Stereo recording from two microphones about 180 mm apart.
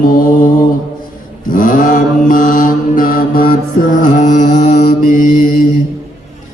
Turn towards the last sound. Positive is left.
turn(degrees=50)  # may be behind; listen again after turning